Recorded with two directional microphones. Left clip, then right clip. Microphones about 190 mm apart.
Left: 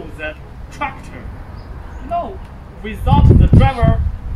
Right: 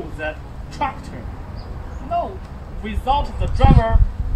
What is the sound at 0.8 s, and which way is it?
Speech, 20° right (ahead or behind).